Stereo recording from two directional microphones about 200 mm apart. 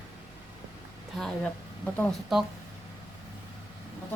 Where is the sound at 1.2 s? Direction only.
5° left (ahead or behind).